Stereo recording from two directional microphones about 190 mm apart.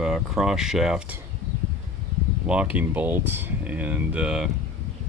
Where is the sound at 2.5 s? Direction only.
5° right (ahead or behind).